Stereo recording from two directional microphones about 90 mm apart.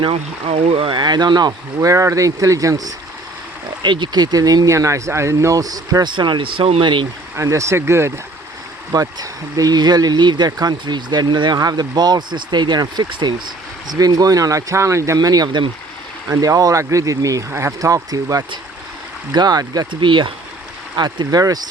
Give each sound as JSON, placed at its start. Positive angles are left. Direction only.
{"t": 0.0, "sound": "speech", "side_deg": -90}
{"t": 1.8, "sound": "speech", "side_deg": -35}
{"t": 3.8, "sound": "speech", "side_deg": -60}
{"t": 7.3, "sound": "speech", "side_deg": -35}
{"t": 8.9, "sound": "speech", "side_deg": -45}
{"t": 13.8, "sound": "speech", "side_deg": -45}
{"t": 19.9, "sound": "speech", "side_deg": -65}
{"t": 20.9, "sound": "speech", "side_deg": -50}